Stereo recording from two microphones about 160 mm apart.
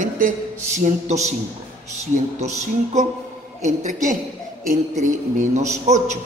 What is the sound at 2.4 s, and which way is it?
A man's voice, 45° right (ahead or behind).